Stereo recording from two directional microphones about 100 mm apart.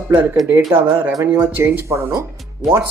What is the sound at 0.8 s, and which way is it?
Speech, 20° right (ahead or behind).